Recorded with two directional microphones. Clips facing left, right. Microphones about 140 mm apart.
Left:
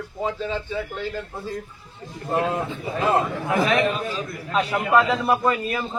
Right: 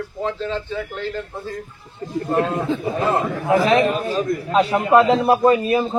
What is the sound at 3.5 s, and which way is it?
Speech, 30° right (ahead or behind).